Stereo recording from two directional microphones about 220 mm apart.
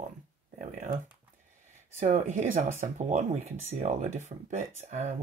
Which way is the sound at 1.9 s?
35° right (ahead or behind).